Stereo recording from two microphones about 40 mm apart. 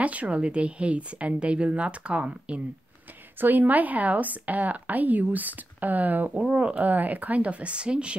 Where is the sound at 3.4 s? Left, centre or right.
Right.